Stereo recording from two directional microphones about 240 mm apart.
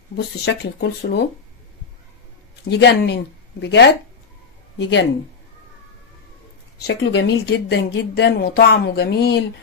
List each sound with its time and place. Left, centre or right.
0.5 s a woman's voice: left
2.7 s a woman's voice: left
6.8 s a woman's voice: left